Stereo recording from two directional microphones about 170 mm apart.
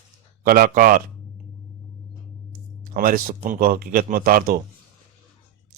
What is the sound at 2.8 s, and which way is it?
Speech, 55° right (ahead or behind).